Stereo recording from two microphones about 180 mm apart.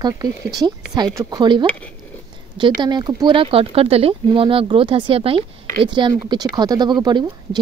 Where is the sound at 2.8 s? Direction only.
25° right (ahead or behind).